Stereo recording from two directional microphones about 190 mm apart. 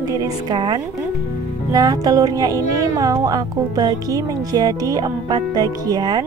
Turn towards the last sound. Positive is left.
turn(degrees=-20)  # may be behind; listen again after turning